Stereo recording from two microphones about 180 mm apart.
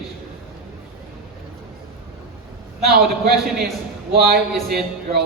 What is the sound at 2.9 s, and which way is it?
Speech, 55° right (ahead or behind).